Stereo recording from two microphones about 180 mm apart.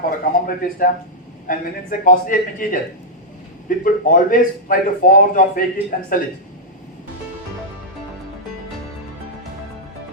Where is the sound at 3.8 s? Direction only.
50° left (ahead or behind).